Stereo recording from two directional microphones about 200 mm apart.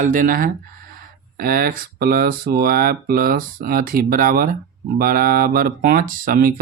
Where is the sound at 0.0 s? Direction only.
45° right (ahead or behind).